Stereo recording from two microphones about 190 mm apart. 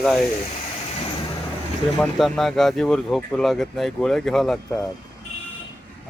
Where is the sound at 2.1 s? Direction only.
Centre (ahead or behind).